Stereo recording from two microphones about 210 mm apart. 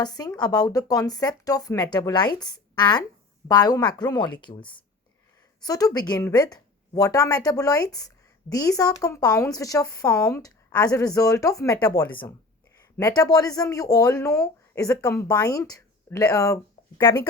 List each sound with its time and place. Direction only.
0.0 s speech: 20° left (ahead or behind)